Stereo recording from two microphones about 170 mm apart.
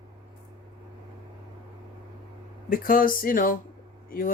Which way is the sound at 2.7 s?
55° left (ahead or behind).